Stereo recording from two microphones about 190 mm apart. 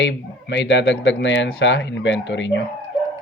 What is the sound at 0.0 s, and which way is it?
Speech, 70° left (ahead or behind).